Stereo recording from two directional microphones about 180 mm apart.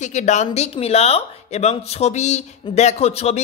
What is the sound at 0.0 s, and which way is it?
A man's voice, 40° left (ahead or behind).